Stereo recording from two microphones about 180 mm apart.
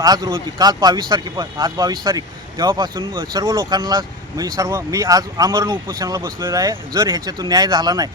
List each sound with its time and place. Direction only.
0.0 s speech: 20° right (ahead or behind)